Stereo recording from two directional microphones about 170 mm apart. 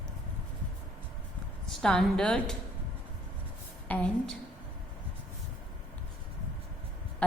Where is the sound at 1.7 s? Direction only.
5° left (ahead or behind).